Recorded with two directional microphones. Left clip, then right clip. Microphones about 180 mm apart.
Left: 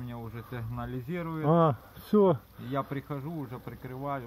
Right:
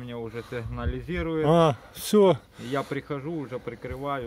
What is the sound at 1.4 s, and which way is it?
Speech, 40° right (ahead or behind).